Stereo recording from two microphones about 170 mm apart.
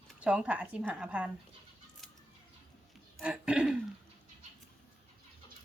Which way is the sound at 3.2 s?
5° right (ahead or behind).